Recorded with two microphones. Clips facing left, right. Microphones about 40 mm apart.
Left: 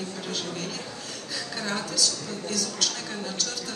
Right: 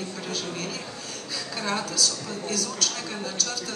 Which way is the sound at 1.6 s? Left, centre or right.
Right.